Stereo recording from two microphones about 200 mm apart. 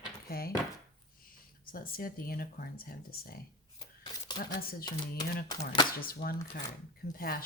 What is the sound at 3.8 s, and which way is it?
Shuffling cards, 25° left (ahead or behind).